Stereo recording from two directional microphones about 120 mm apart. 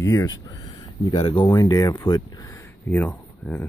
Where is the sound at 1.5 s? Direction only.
30° left (ahead or behind).